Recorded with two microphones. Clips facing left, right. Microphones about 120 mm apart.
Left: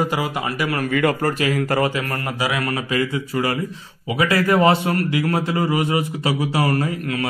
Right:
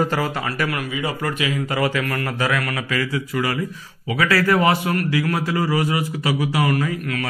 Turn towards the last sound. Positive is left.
turn(degrees=25)  # may be behind; listen again after turning